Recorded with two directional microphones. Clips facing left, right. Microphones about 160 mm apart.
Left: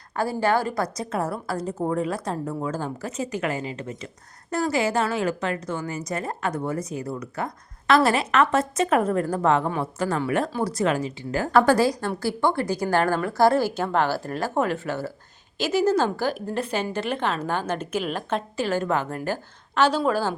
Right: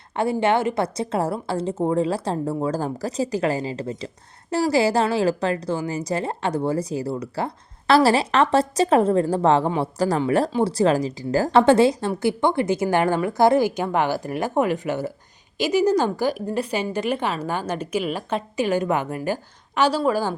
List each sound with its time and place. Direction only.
0.2 s a woman's voice: 25° right (ahead or behind)
11.5 s a woman's voice: 25° right (ahead or behind); by 20.3 s 10° right (ahead or behind)